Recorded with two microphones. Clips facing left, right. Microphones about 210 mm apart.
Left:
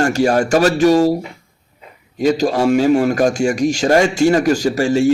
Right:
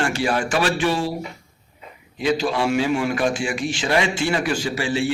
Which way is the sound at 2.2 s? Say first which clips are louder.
Left 6 dB; 40° left (ahead or behind).